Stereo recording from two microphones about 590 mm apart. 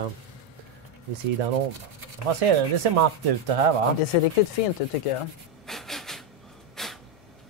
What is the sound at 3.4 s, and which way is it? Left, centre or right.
Speech, right.